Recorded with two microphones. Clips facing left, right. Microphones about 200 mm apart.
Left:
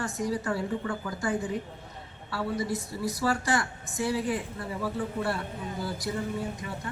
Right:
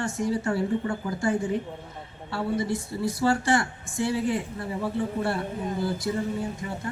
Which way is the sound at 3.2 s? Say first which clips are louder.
Right 5 dB; 25° right (ahead or behind).